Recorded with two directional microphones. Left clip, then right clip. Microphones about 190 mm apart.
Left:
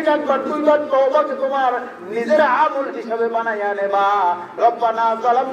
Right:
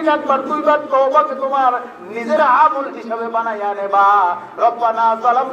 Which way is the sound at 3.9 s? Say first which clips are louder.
Right 5 dB; 40° right (ahead or behind).